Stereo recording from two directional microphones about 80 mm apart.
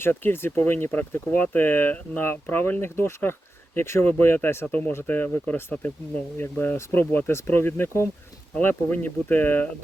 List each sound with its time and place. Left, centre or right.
0.0 s speech: left